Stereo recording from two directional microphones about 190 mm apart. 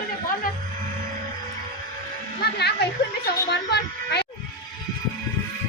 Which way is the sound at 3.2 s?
60° left (ahead or behind).